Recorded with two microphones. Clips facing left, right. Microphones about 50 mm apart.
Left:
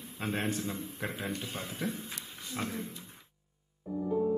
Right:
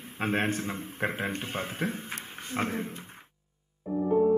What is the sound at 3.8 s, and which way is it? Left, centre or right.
Music, right.